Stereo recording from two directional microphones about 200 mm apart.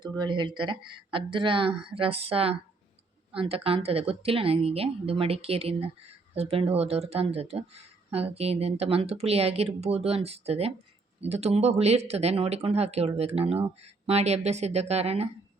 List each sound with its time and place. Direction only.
0.2 s a woman's voice: 20° right (ahead or behind)